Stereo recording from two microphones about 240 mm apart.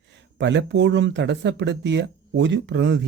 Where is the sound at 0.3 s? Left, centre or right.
Right.